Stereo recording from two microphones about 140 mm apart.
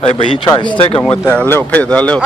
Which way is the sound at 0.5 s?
35° left (ahead or behind).